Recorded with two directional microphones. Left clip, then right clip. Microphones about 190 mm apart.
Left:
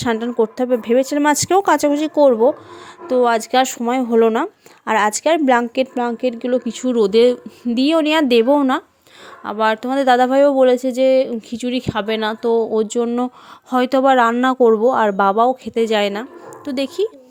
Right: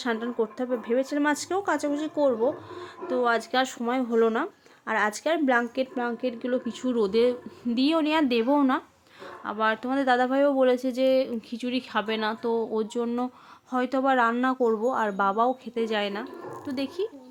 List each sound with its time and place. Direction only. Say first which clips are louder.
0.0 s speech: left 10 dB; 40° left (ahead or behind)